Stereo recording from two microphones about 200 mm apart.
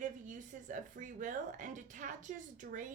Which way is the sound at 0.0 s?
40° right (ahead or behind).